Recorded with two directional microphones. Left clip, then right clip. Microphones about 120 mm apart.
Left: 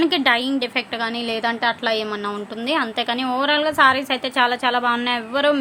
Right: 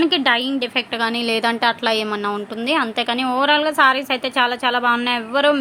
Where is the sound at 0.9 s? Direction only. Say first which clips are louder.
Right 4 dB; 25° right (ahead or behind).